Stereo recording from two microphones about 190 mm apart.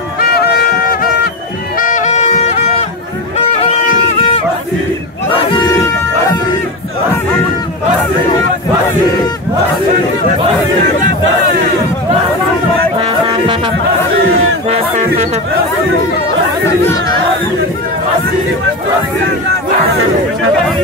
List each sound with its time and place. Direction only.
0.2 s a sound: 55° left (ahead or behind)
1.8 s music: 40° left (ahead or behind)
3.3 s music: 35° left (ahead or behind)